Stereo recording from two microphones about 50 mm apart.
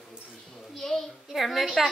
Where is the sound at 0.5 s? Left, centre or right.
Centre.